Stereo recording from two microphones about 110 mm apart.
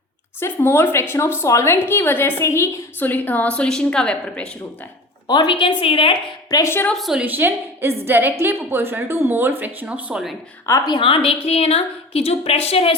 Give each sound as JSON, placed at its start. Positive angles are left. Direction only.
{"t": 0.3, "sound": "a woman's voice", "side_deg": 20}
{"t": 5.3, "sound": "a woman's voice", "side_deg": 45}
{"t": 6.5, "sound": "a woman's voice", "side_deg": 25}
{"t": 6.9, "sound": "a woman's voice", "side_deg": 0}
{"t": 7.3, "sound": "a woman's voice", "side_deg": -20}
{"t": 10.7, "sound": "a woman's voice", "side_deg": 35}
{"t": 11.4, "sound": "a woman's voice", "side_deg": 65}